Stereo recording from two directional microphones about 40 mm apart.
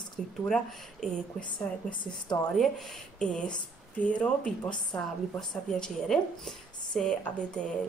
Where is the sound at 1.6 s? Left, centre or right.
Left.